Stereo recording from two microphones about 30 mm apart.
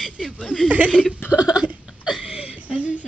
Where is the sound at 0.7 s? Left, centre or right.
Right.